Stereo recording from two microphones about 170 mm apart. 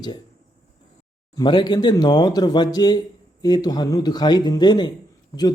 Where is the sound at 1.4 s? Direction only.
25° left (ahead or behind).